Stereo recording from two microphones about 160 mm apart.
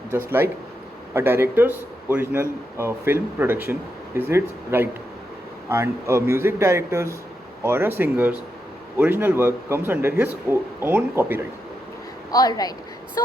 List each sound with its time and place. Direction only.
0.3 s a man's voice: 15° right (ahead or behind)
12.3 s speech: 25° left (ahead or behind)